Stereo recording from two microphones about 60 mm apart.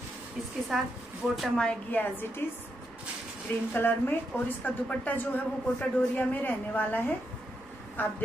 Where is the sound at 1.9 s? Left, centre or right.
Left.